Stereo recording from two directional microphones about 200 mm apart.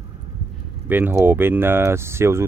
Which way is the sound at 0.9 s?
10° right (ahead or behind).